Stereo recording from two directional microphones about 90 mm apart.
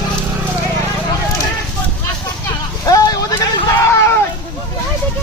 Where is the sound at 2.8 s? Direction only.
45° left (ahead or behind).